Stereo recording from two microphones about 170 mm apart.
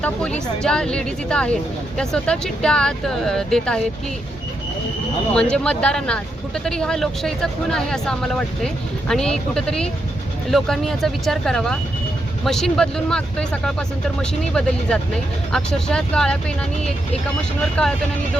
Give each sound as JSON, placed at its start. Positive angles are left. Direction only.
{"t": 0.0, "sound": "speech", "side_deg": 5}
{"t": 5.3, "sound": "speech", "side_deg": 5}
{"t": 17.8, "sound": "speech", "side_deg": 5}